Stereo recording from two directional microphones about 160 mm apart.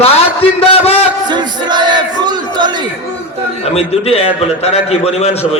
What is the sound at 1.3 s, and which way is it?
Crowd, 25° right (ahead or behind).